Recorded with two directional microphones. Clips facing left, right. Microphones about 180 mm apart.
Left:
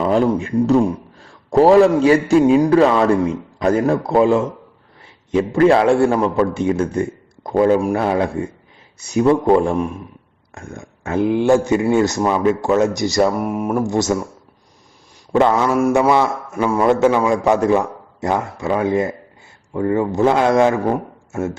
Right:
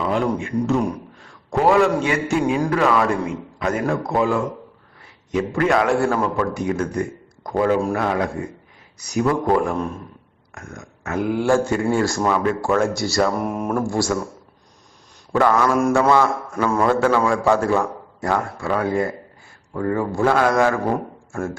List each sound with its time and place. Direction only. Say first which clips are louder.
0.0 s a man's voice: left 5 dB; 35° left (ahead or behind); by 13.3 s 20° left (ahead or behind)
13.4 s speech: left 3 dB; 5° left (ahead or behind)
13.8 s a man's voice: left 3 dB; 20° left (ahead or behind)
15.3 s a man's voice: left 2 dB; 20° left (ahead or behind)